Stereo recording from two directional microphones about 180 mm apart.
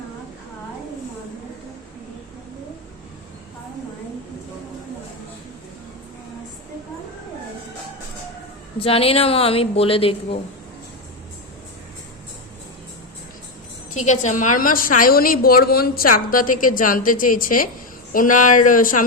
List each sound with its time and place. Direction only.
8.8 s a woman's voice: 30° left (ahead or behind)
13.9 s a woman's voice: 40° left (ahead or behind)